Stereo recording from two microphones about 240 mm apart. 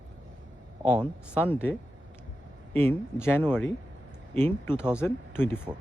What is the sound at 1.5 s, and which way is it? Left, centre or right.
Speech, centre.